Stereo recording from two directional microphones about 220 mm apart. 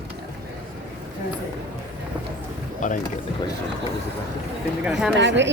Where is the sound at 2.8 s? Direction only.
35° left (ahead or behind).